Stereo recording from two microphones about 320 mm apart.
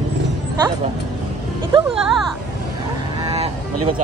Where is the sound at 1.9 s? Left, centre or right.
Centre.